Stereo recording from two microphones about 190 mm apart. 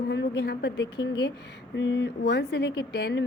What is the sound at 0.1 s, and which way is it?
Speech, 65° left (ahead or behind).